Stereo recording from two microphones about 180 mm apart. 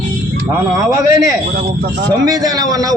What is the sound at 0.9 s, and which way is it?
A man's voice, 20° right (ahead or behind).